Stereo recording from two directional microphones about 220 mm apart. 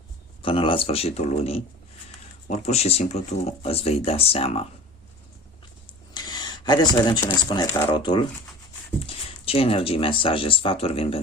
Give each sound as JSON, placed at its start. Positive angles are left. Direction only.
{"t": 0.4, "sound": "speech", "side_deg": 25}
{"t": 6.1, "sound": "speech", "side_deg": 20}